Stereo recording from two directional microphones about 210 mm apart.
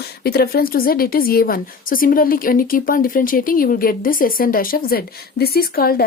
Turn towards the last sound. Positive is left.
turn(degrees=45)  # may be behind; listen again after turning